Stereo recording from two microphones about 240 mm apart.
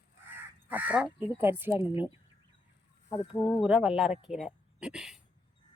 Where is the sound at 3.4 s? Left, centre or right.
Centre.